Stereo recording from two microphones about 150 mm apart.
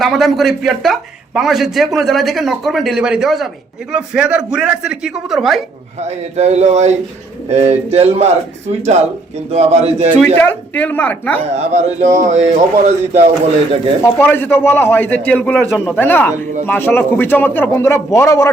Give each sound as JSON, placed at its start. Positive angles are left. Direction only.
{"t": 0.0, "sound": "a man's voice", "side_deg": 0}
{"t": 6.0, "sound": "a man's voice", "side_deg": -50}
{"t": 10.3, "sound": "a man's voice", "side_deg": 10}
{"t": 11.4, "sound": "a man's voice", "side_deg": -45}
{"t": 14.0, "sound": "a man's voice", "side_deg": 15}